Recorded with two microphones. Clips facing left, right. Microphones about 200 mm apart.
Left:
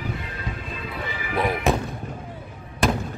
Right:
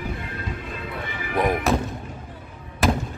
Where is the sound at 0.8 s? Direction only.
55° right (ahead or behind).